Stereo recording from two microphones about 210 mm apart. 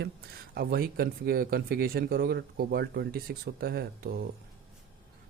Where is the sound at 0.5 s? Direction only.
45° right (ahead or behind).